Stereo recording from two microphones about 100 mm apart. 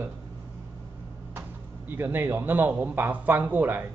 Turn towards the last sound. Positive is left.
turn(degrees=-15)  # may be behind; listen again after turning